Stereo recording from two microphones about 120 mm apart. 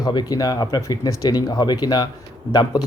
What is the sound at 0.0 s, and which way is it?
Speech, 35° left (ahead or behind).